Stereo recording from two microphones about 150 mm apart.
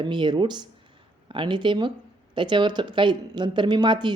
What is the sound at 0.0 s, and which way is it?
Speech, 30° right (ahead or behind).